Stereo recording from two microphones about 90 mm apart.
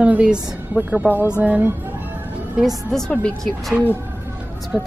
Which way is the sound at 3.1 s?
15° left (ahead or behind).